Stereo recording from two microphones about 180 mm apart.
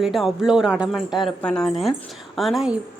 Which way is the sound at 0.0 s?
Centre (ahead or behind).